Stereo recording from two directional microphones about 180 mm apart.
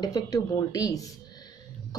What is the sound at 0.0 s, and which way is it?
Speech, 20° left (ahead or behind).